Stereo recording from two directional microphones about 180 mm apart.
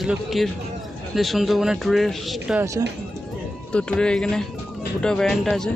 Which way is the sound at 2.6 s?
15° right (ahead or behind).